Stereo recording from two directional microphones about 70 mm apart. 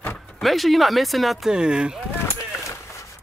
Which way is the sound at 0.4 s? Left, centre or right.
Centre.